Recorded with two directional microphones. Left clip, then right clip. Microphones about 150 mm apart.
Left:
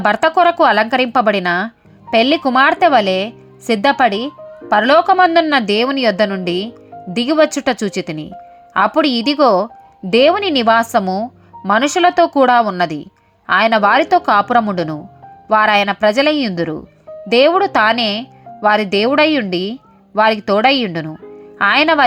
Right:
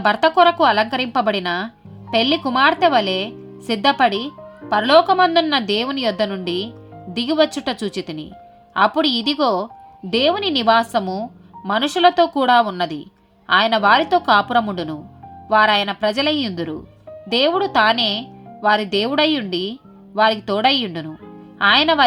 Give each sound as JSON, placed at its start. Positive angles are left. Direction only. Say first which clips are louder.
{"t": 0.0, "sound": "speech", "louder": "left 2 dB", "side_deg": 45}